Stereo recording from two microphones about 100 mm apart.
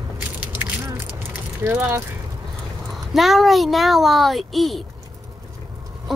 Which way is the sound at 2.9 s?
Centre (ahead or behind).